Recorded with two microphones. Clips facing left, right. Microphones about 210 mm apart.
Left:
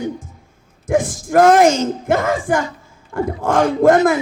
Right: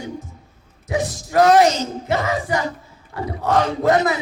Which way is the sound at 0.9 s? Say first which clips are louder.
Left 6 dB; 50° left (ahead or behind).